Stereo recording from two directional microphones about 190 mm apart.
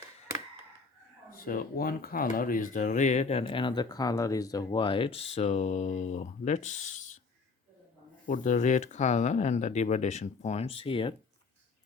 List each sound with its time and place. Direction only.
1.3 s speech: 50° left (ahead or behind)
8.3 s speech: 40° left (ahead or behind)